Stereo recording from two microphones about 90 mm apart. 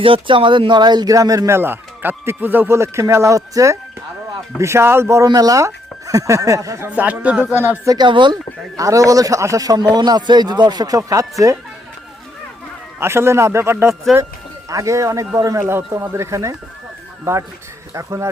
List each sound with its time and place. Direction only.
0.0 s a man's voice: 75° right (ahead or behind); by 5.3 s 30° right (ahead or behind)
5.3 s speech: 45° right (ahead or behind)
6.9 s a man's voice: 15° right (ahead or behind)
7.9 s speech: 55° right (ahead or behind)
8.7 s speech: 40° right (ahead or behind)
13.0 s a man's voice: 30° right (ahead or behind)
14.1 s speech: 10° right (ahead or behind)
14.7 s speech: 35° right (ahead or behind)
17.9 s speech: 35° right (ahead or behind)